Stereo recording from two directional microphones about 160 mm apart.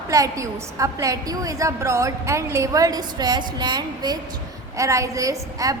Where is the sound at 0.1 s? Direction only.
20° right (ahead or behind).